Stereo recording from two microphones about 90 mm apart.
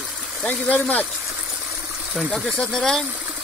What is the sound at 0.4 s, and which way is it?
Speech, 15° left (ahead or behind).